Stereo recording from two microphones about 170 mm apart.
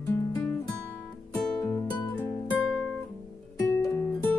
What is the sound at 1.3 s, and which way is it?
Music, 5° left (ahead or behind).